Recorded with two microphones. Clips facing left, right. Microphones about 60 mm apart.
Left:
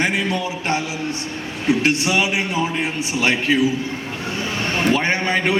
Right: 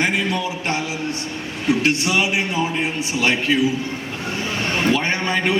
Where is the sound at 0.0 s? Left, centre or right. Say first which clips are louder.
Even; left.